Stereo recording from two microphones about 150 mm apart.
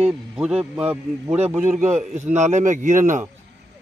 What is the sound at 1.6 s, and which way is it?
A man's voice, 50° right (ahead or behind).